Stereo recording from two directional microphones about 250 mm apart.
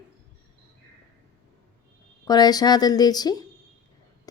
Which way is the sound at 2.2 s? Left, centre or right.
Centre.